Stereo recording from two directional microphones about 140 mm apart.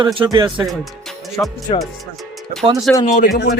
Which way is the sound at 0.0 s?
40° right (ahead or behind).